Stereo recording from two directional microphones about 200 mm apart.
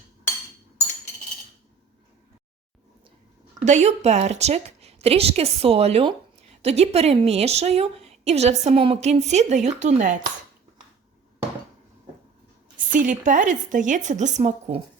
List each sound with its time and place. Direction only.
3.6 s a woman's voice: 35° right (ahead or behind)
12.9 s a woman's voice: 40° right (ahead or behind)